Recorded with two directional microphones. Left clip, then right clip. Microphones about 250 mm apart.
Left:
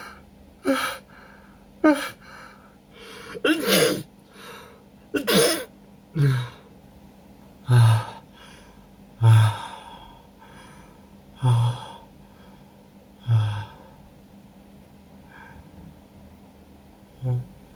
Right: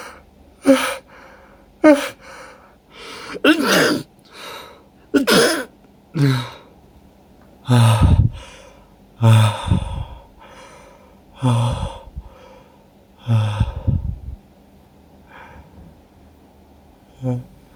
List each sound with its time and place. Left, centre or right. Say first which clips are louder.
0.6 s gasp: right 9 dB; right
1.8 s a sound: right 8 dB; right
5.1 s throat clearing: right 6 dB; right
6.1 s gasp: right 7 dB; right
7.6 s a sound: right 7 dB; right
9.2 s gasp: right 6 dB; right
11.3 s gasp: right 7 dB; right
13.2 s gasp: right 7 dB; right